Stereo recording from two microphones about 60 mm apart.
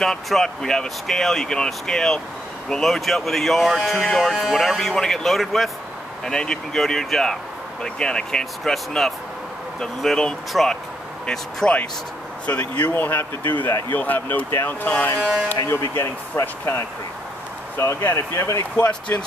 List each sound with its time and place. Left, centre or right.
0.0 s speech: centre
6.2 s speech: centre
11.2 s speech: centre
12.5 s speech: left
15.6 s speech: left
18.9 s speech: left